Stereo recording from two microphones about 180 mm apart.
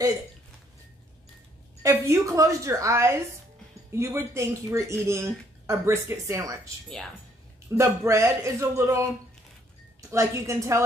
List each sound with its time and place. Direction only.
1.8 s speech: 15° right (ahead or behind)
7.7 s speech: 15° right (ahead or behind)
10.1 s speech: 15° right (ahead or behind)